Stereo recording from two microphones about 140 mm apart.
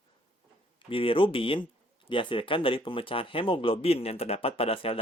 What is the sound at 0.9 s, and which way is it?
Speech, 40° left (ahead or behind).